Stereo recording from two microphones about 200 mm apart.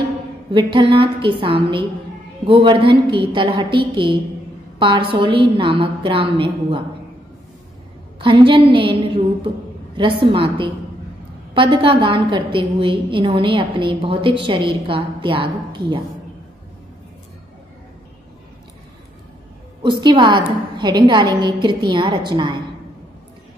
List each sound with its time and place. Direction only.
0.5 s a woman's voice: 25° right (ahead or behind)
8.2 s a woman's voice: 25° right (ahead or behind)
9.9 s a woman's voice: 25° right (ahead or behind)
19.8 s a woman's voice: 20° right (ahead or behind)